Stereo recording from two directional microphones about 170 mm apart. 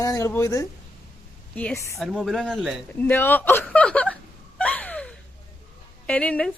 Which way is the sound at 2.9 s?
10° left (ahead or behind).